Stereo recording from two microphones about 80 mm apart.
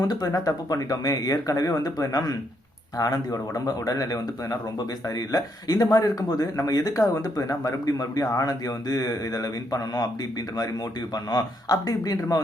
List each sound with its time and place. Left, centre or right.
0.1 s speech: left
11.1 s speech: left